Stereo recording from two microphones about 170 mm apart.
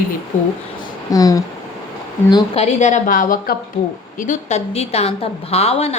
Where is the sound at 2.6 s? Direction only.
40° left (ahead or behind); by 3.6 s 60° left (ahead or behind).